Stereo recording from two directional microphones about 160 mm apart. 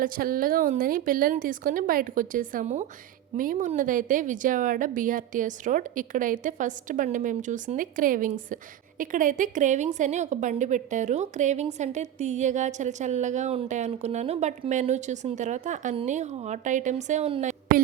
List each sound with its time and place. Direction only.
0.0 s a woman's voice: 60° right (ahead or behind)